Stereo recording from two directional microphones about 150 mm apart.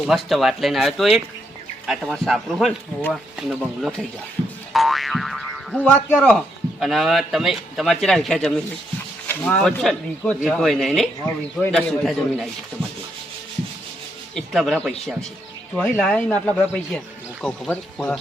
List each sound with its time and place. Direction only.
0.0 s a man's voice: centre (ahead or behind)
4.7 s boing: centre (ahead or behind)
5.9 s a man's voice: 10° left (ahead or behind)
14.3 s a man's voice: centre (ahead or behind)